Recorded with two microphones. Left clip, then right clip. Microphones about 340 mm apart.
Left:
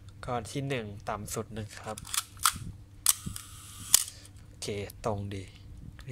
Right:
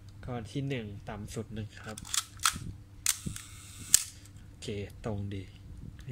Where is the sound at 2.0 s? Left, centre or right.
Centre.